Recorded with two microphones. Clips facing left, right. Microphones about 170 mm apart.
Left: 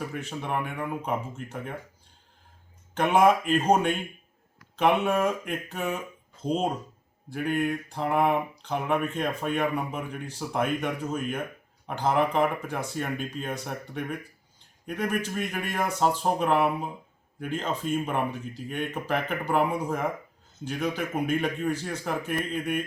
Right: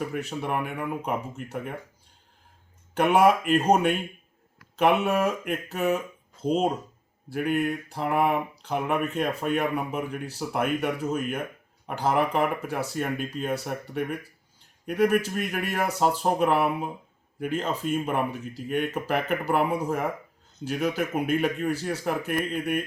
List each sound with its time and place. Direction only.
0.1 s speech: 10° right (ahead or behind)
2.9 s speech: 10° right (ahead or behind)